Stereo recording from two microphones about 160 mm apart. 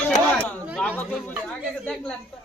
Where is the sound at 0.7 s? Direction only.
10° left (ahead or behind).